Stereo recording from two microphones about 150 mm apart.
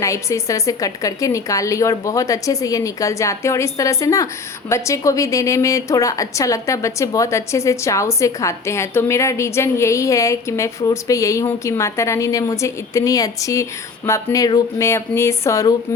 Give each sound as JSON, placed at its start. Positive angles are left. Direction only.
{"t": 0.0, "sound": "a woman's voice", "side_deg": 20}